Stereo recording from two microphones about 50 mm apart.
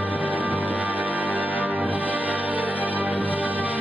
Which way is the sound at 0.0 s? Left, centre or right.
Right.